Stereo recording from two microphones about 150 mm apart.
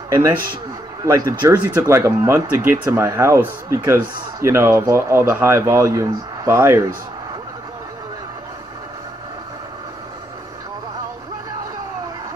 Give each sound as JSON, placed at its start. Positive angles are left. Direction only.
{"t": 0.1, "sound": "speech", "side_deg": -20}